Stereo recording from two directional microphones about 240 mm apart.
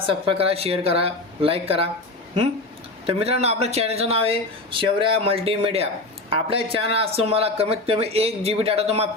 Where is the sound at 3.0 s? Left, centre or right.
Right.